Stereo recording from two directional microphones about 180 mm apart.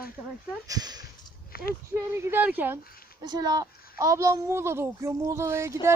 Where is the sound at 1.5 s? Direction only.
55° left (ahead or behind).